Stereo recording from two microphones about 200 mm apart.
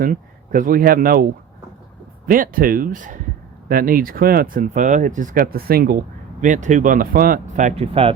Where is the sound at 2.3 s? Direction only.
45° right (ahead or behind).